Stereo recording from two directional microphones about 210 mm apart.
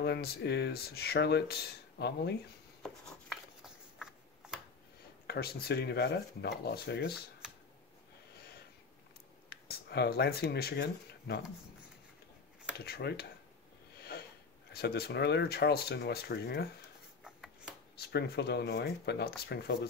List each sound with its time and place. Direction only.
0.0 s speech: 50° left (ahead or behind)
2.8 s a sound: centre (ahead or behind)
5.2 s speech: 50° left (ahead or behind)
9.5 s speech: 50° left (ahead or behind)
12.7 s speech: 50° left (ahead or behind)
14.7 s speech: 50° left (ahead or behind)
17.2 s a sound: centre (ahead or behind)
17.9 s speech: 50° left (ahead or behind)